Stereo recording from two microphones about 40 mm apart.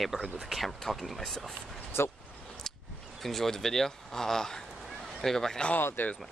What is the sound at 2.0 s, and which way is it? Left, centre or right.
Speech, left.